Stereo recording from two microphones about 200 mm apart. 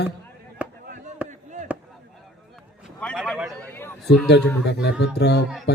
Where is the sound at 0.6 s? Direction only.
10° right (ahead or behind).